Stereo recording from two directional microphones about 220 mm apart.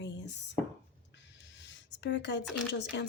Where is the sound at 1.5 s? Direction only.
55° left (ahead or behind).